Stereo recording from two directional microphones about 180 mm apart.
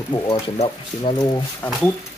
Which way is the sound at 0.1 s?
25° left (ahead or behind).